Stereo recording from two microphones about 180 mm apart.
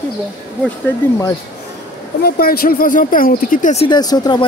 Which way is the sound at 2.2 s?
60° left (ahead or behind).